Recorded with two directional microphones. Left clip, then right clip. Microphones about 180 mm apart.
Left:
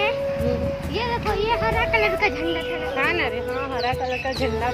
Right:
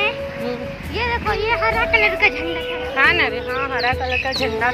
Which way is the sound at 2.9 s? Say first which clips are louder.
Right 8 dB; 5° left (ahead or behind).